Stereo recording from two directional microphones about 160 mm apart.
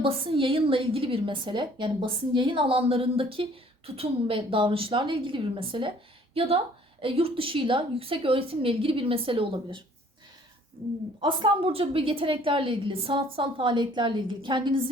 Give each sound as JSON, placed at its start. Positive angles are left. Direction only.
{"t": 0.0, "sound": "a woman's voice", "side_deg": -35}
{"t": 7.0, "sound": "a woman's voice", "side_deg": -35}
{"t": 11.2, "sound": "a woman's voice", "side_deg": -30}